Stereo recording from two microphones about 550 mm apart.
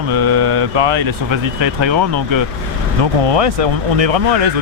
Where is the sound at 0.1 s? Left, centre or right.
Right.